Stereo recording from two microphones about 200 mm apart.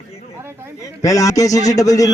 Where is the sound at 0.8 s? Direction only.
15° left (ahead or behind).